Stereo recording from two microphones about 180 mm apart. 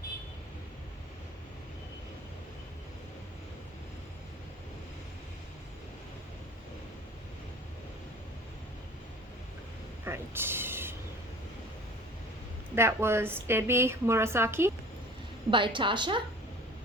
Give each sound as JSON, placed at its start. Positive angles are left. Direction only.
{"t": 10.0, "sound": "mechanisms", "side_deg": -15}
{"t": 12.7, "sound": "a woman's voice", "side_deg": -15}
{"t": 15.4, "sound": "a woman's voice", "side_deg": -25}